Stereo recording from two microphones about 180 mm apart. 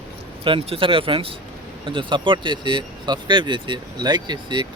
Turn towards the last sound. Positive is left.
turn(degrees=-25)  # may be behind; listen again after turning